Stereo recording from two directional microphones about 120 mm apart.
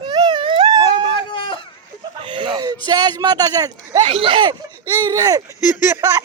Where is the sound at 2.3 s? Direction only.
45° right (ahead or behind).